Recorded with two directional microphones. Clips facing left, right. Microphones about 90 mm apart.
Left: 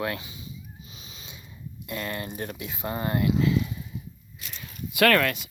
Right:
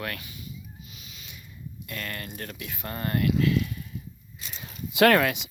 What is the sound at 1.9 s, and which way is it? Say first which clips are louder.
Speech: left 4 dB; 20° left (ahead or behind).